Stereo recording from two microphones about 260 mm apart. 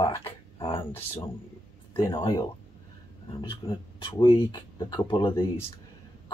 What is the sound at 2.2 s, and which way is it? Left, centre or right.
Speech, centre.